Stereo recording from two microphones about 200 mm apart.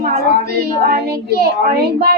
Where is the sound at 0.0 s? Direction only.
50° right (ahead or behind).